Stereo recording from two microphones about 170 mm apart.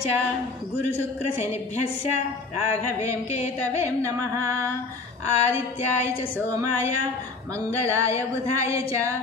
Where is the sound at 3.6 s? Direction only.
15° right (ahead or behind).